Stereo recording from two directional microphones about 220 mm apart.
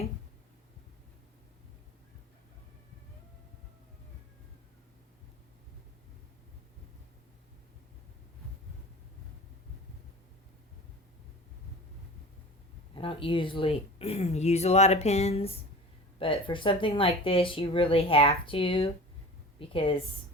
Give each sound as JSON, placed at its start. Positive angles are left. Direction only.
{"t": 12.9, "sound": "speech", "side_deg": 25}